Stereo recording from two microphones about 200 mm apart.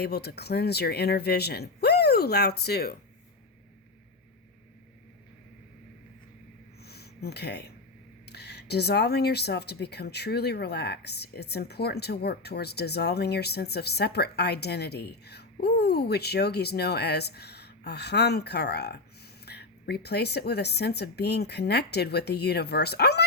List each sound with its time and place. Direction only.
0.0 s speech: 55° left (ahead or behind)
6.8 s a sound: 55° left (ahead or behind)
8.3 s speech: 55° left (ahead or behind)